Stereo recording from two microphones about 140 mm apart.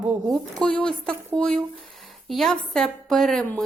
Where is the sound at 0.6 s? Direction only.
5° left (ahead or behind).